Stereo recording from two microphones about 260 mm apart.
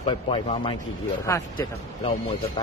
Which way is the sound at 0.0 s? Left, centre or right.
Centre.